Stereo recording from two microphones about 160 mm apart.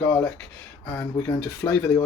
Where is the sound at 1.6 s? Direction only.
20° left (ahead or behind).